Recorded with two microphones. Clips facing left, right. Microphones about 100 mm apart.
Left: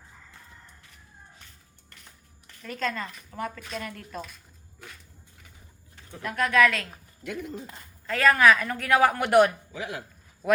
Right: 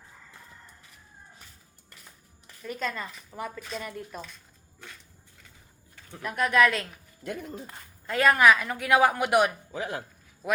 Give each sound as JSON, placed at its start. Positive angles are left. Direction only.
{"t": 2.5, "sound": "speech", "side_deg": -10}
{"t": 3.6, "sound": "speech", "side_deg": 0}
{"t": 3.8, "sound": "speech", "side_deg": -10}
{"t": 6.2, "sound": "a woman's voice", "side_deg": -15}
{"t": 8.0, "sound": "speech", "side_deg": -20}
{"t": 9.7, "sound": "speech", "side_deg": -35}